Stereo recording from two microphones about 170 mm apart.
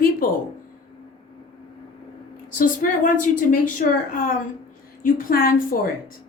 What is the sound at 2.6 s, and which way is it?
A woman's voice, 50° left (ahead or behind).